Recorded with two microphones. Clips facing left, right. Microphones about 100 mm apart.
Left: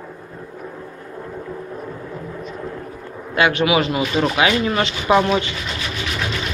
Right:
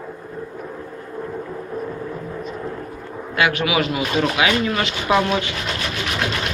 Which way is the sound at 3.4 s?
25° left (ahead or behind).